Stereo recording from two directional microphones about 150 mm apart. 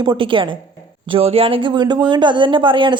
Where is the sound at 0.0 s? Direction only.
30° right (ahead or behind).